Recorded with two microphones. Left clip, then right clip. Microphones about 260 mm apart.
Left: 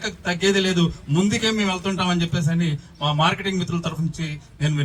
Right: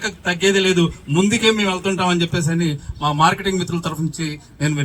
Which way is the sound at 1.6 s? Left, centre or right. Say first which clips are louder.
Right 4 dB; right.